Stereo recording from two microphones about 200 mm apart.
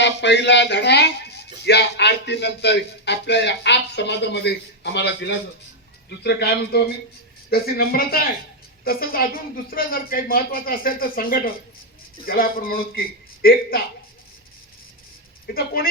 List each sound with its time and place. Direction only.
0.0 s a woman's voice: 60° left (ahead or behind)
15.5 s a woman's voice: 50° left (ahead or behind)